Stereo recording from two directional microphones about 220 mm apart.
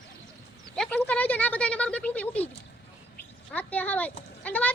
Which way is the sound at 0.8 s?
5° left (ahead or behind).